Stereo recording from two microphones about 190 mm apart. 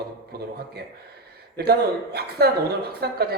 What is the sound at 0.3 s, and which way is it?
Speech, 55° right (ahead or behind).